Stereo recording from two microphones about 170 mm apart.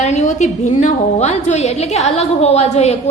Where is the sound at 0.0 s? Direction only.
40° left (ahead or behind).